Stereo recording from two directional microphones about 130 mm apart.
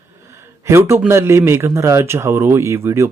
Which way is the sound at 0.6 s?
20° right (ahead or behind).